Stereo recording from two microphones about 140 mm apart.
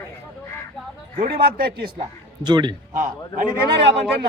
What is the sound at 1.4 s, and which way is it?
Speech, 90° right.